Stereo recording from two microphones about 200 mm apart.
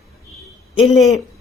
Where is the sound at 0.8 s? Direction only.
Centre (ahead or behind).